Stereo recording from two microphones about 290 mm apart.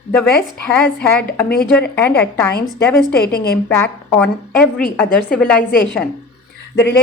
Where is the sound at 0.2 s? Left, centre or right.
Centre.